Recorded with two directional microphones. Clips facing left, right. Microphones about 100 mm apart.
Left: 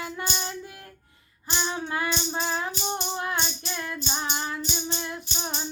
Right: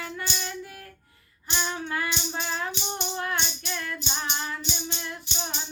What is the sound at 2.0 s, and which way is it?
Music, 35° left (ahead or behind).